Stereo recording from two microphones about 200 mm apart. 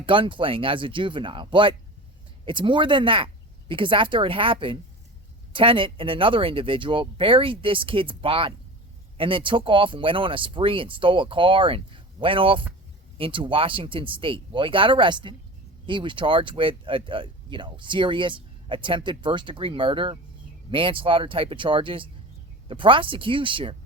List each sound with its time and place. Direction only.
0.0 s speech: 25° right (ahead or behind)